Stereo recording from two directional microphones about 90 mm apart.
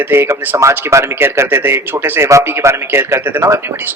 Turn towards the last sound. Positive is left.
turn(degrees=-25)  # may be behind; listen again after turning